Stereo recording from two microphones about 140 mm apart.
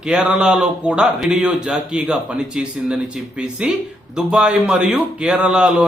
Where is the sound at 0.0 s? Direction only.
5° right (ahead or behind).